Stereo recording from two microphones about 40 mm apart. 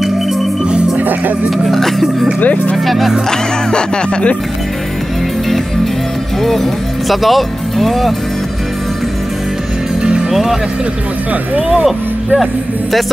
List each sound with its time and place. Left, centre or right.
0.9 s music: right
1.5 s speech: centre
2.4 s speech: left
2.7 s speech: centre
3.3 s speech: left
6.4 s speech: centre
10.3 s speech: centre